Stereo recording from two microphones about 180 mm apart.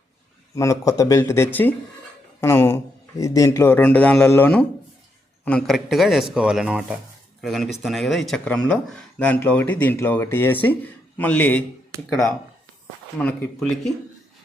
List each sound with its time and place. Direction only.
0.5 s speech: 15° left (ahead or behind)